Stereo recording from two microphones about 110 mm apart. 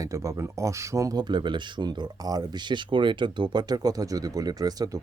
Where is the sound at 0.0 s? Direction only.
30° right (ahead or behind).